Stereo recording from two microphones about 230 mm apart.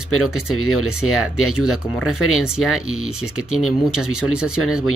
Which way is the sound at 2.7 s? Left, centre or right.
Left.